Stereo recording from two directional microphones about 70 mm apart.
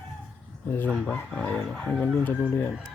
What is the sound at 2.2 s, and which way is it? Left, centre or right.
Speech, left.